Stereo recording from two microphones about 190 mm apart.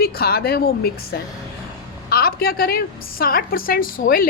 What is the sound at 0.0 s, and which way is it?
A woman's voice, 55° left (ahead or behind).